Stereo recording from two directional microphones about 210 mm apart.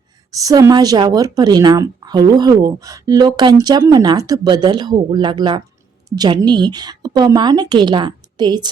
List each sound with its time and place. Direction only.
0.3 s speech: 15° right (ahead or behind)